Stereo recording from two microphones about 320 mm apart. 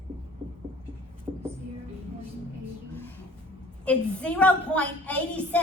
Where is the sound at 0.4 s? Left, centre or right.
Centre.